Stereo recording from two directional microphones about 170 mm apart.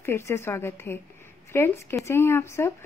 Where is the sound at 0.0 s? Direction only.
15° left (ahead or behind).